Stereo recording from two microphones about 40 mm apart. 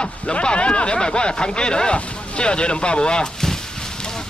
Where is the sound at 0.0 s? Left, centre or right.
Left.